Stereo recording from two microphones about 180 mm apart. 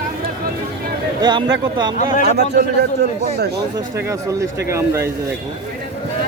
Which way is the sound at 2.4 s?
65° right (ahead or behind).